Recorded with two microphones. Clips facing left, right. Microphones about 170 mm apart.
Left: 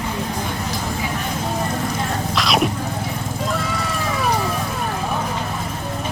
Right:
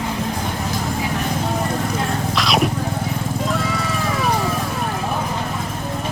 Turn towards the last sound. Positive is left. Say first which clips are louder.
# right 1 dB
turn(degrees=0)  # may be behind; listen again after turning